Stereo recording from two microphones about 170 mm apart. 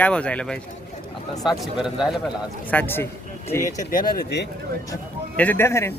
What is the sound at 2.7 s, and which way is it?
Speech, 10° left (ahead or behind).